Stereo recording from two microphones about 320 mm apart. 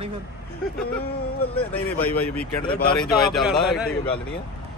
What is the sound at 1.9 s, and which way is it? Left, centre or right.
Speech, centre.